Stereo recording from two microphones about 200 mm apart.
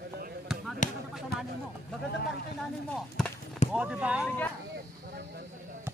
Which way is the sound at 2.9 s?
5° left (ahead or behind).